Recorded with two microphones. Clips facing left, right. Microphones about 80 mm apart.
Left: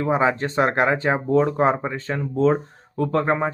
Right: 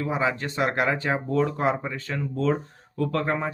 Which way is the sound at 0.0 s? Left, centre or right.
Left.